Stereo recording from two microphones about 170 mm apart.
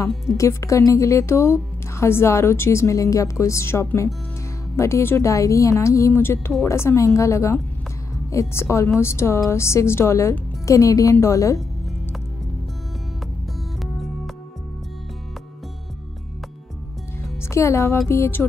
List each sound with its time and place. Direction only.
0.4 s a woman's voice: 15° left (ahead or behind)
13.9 s music: centre (ahead or behind)
17.4 s speech: 15° left (ahead or behind)